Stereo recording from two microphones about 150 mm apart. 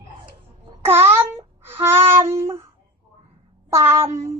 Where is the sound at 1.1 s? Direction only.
15° right (ahead or behind).